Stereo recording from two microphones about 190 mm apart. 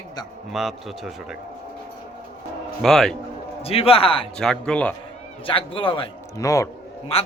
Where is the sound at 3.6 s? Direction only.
30° left (ahead or behind).